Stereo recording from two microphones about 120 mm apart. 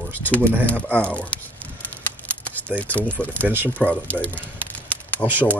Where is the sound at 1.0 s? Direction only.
10° left (ahead or behind).